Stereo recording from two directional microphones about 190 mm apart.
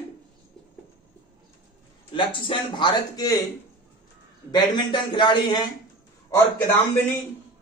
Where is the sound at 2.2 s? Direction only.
25° left (ahead or behind).